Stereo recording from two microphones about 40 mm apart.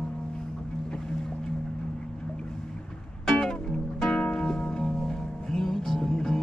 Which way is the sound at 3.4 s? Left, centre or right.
Centre.